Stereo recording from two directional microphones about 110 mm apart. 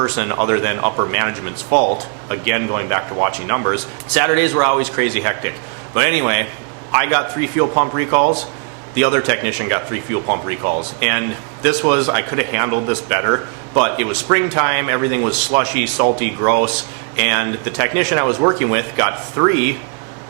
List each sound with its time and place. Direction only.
0.0 s speech: 20° right (ahead or behind)